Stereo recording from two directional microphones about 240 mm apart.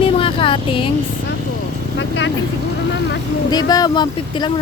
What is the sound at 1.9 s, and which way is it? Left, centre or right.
Vehicle, left.